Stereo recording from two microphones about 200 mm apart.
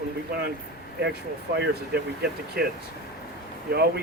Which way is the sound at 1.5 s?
55° right (ahead or behind).